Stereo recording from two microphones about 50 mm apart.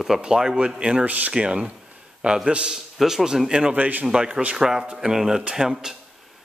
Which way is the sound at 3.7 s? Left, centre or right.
Right.